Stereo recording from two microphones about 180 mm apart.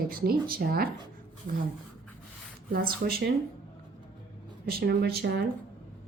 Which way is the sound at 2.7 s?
55° right (ahead or behind).